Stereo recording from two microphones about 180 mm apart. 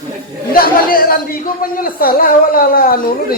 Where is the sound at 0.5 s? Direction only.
55° left (ahead or behind).